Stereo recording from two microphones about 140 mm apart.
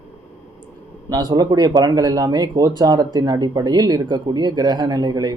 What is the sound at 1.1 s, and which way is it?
Speech, 30° right (ahead or behind).